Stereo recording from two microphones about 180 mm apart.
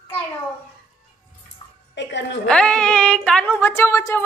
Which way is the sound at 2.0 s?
80° left.